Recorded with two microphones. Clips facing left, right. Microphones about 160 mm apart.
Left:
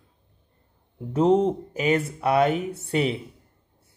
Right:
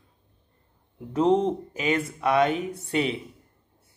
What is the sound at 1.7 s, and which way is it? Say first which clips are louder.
Speech: left 3 dB; 35° left (ahead or behind).